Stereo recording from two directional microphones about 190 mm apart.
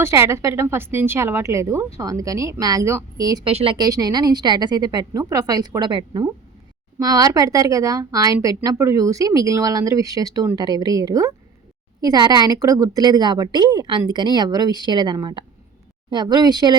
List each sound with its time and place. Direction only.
0.0 s a woman's voice: 15° right (ahead or behind)